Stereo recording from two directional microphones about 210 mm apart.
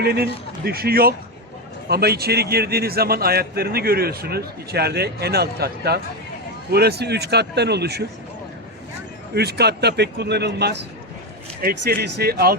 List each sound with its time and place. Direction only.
0.0 s a man's voice: 50° right (ahead or behind)
9.3 s a man's voice: 50° right (ahead or behind)
12.0 s a man's voice: 50° right (ahead or behind)